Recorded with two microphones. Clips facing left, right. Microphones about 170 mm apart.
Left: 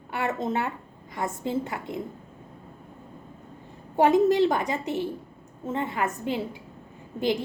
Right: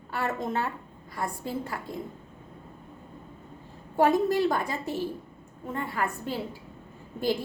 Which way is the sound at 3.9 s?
20° left (ahead or behind).